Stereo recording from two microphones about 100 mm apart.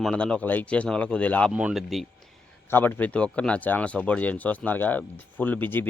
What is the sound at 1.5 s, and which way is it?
Speech, 10° right (ahead or behind).